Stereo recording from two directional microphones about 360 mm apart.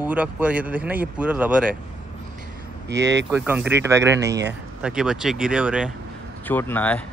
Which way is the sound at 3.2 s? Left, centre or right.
Centre.